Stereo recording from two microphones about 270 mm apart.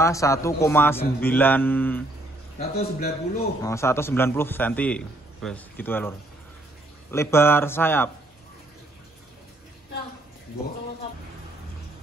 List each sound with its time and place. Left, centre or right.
0.0 s a man's voice: centre
2.6 s a man's voice: left
3.6 s a man's voice: centre